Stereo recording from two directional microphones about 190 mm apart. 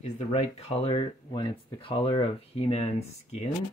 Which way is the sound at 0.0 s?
35° left (ahead or behind).